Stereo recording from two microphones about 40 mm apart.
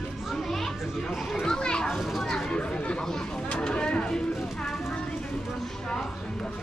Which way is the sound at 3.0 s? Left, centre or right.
Centre.